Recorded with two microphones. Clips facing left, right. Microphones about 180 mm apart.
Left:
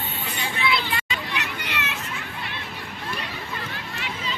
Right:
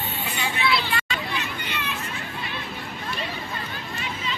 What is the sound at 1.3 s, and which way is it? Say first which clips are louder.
Hubbub: even; 80° left.